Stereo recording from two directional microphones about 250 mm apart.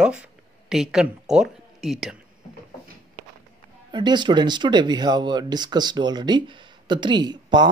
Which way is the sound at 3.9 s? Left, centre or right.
Centre.